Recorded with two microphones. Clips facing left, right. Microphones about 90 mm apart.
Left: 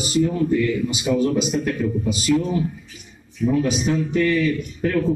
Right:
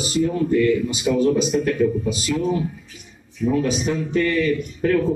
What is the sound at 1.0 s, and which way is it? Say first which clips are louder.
Speech: right 1 dB; 5° left (ahead or behind).